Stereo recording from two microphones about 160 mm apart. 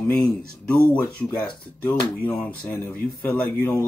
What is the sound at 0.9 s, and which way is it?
Speech, 10° left (ahead or behind).